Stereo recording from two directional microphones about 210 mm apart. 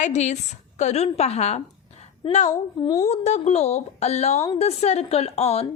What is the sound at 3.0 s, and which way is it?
A woman's voice, 30° left (ahead or behind).